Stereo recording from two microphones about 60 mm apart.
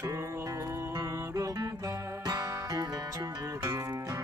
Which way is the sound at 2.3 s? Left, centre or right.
Right.